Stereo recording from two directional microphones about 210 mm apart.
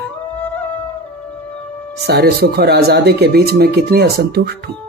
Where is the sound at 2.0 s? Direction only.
50° right (ahead or behind).